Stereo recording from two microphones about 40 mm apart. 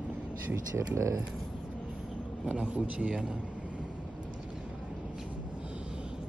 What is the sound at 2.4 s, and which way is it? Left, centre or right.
Speech, right.